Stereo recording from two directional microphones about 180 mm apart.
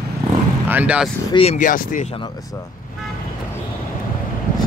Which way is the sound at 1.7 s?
50° left (ahead or behind).